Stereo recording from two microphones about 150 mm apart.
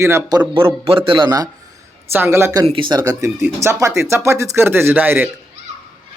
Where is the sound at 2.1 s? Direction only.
15° right (ahead or behind).